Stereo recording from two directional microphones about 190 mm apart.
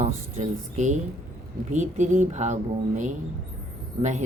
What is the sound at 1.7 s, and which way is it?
Mantra, 40° right (ahead or behind).